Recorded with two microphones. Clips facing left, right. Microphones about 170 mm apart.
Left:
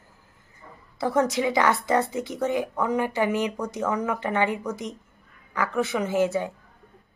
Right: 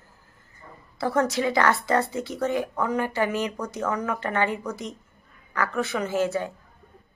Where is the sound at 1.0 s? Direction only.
15° left (ahead or behind).